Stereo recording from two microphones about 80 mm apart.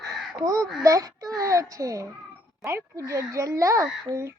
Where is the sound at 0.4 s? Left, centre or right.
Right.